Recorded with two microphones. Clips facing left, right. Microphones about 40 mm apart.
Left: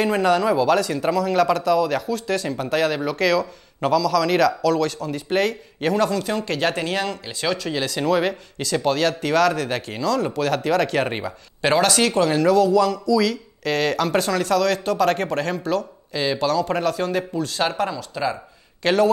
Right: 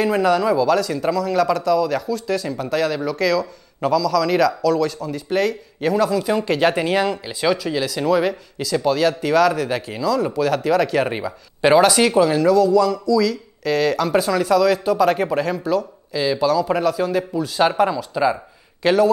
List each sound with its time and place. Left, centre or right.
0.0 s speech: centre
11.1 s speech: centre
11.6 s speech: centre
12.3 s speech: centre
16.4 s speech: centre
18.3 s a sound: centre